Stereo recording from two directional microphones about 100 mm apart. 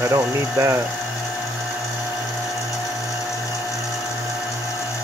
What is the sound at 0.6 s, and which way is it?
Speech, 30° right (ahead or behind).